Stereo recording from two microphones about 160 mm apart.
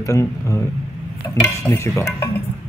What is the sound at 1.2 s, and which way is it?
Stir, 15° left (ahead or behind).